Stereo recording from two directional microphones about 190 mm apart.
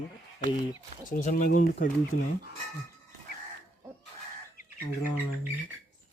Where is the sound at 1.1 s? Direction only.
45° left (ahead or behind).